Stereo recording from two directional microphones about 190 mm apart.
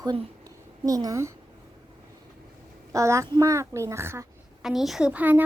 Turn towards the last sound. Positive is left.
turn(degrees=-10)  # may be behind; listen again after turning